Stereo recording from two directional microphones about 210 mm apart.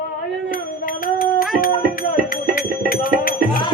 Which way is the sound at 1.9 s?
45° left (ahead or behind).